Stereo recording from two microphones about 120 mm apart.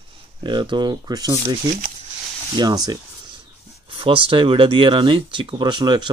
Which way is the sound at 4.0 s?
45° right (ahead or behind).